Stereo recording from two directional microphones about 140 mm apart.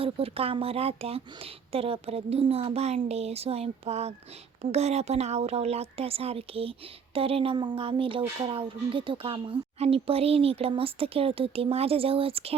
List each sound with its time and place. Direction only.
0.0 s speech: 45° right (ahead or behind)